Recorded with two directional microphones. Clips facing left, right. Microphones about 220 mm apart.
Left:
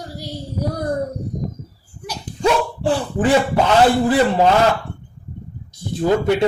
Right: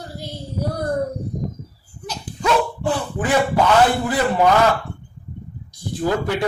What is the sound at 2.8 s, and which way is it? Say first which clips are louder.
Speech: left 3 dB; 30° left (ahead or behind).